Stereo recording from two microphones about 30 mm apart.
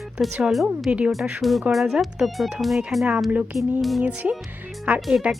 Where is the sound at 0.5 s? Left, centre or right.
Centre.